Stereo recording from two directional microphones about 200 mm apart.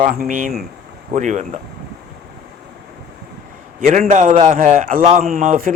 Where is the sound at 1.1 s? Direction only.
35° right (ahead or behind).